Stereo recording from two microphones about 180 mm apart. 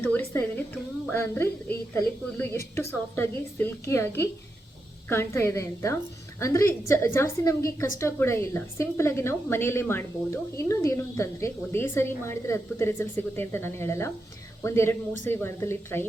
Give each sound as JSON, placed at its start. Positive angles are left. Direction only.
{"t": 0.0, "sound": "a woman's voice", "side_deg": 10}